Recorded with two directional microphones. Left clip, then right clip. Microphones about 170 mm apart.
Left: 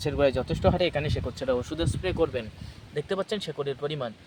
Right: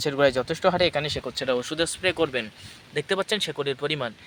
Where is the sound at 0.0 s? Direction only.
5° right (ahead or behind).